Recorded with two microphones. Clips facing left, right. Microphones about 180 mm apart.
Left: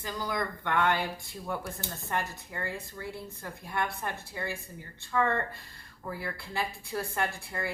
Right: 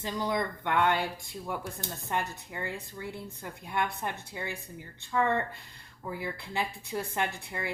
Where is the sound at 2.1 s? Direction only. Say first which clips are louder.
Right 1 dB; 15° right (ahead or behind).